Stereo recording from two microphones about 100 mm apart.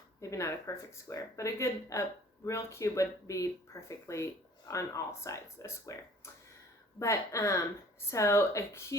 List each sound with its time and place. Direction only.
0.2 s speech: 30° left (ahead or behind)
7.0 s speech: 30° left (ahead or behind)